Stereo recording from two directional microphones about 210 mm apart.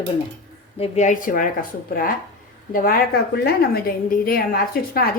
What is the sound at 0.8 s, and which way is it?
A woman's voice, 35° left (ahead or behind).